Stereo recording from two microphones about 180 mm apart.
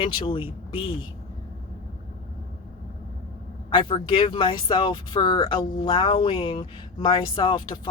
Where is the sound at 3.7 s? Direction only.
30° left (ahead or behind).